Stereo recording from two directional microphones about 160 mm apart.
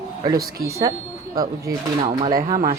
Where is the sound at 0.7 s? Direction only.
20° right (ahead or behind).